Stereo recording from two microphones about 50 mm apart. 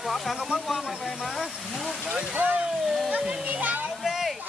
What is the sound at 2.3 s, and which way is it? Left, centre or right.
Speech, right.